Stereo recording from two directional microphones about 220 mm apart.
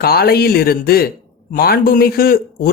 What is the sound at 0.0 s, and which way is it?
Speech, 45° left (ahead or behind).